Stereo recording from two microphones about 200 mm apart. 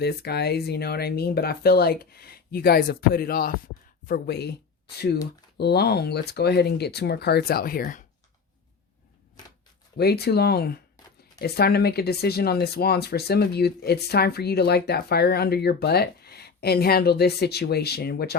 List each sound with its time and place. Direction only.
0.0 s speech: 55° left (ahead or behind)
10.0 s speech: 55° left (ahead or behind)